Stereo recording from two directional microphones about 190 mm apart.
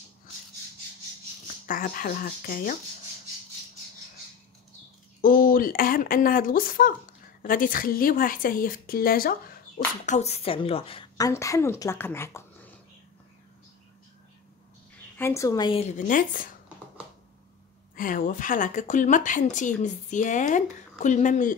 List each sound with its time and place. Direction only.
1.7 s a woman's voice: 45° left (ahead or behind)
5.2 s a woman's voice: 50° left (ahead or behind)
10.0 s a woman's voice: 35° left (ahead or behind); by 12.7 s 10° left (ahead or behind)
15.1 s a woman's voice: 15° left (ahead or behind)
15.8 s a woman's voice: 45° left (ahead or behind)
17.9 s a woman's voice: 45° left (ahead or behind)